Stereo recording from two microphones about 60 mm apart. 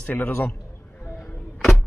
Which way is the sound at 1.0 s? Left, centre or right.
Left.